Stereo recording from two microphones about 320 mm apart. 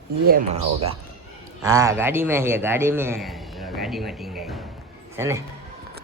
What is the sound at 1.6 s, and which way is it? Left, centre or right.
A man's voice, centre.